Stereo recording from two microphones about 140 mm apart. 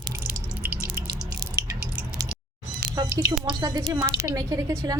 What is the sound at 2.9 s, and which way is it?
Drip, 25° right (ahead or behind).